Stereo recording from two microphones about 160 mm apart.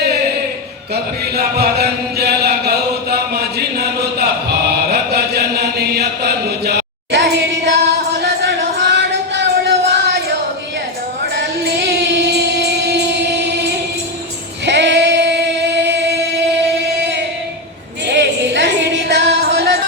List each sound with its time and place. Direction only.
1.2 s chant: 80° right
8.2 s music: 90° right
14.6 s female singing: 90° right
17.0 s music: 90° right